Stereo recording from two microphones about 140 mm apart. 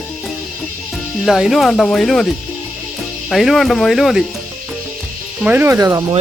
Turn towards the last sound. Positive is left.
turn(degrees=-20)  # may be behind; listen again after turning